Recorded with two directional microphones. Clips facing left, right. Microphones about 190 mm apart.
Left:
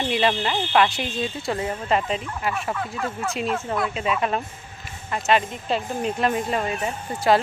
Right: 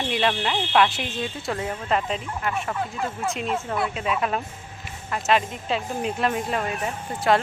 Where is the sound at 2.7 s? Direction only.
15° right (ahead or behind).